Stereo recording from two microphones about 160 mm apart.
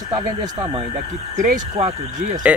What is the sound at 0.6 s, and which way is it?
Speech, 35° right (ahead or behind).